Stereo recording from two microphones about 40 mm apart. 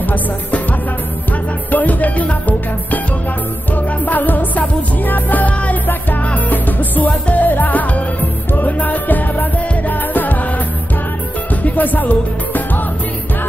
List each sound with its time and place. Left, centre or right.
0.1 s music: left
11.6 s music: left